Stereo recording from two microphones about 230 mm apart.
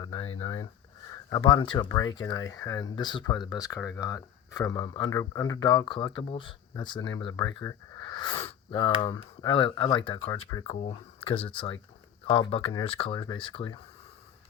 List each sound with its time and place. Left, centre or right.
0.4 s speech: centre